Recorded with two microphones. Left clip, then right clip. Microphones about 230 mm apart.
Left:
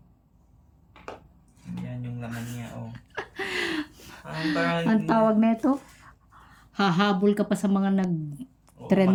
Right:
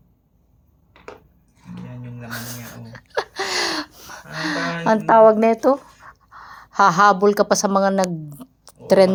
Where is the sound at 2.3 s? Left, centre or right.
Centre.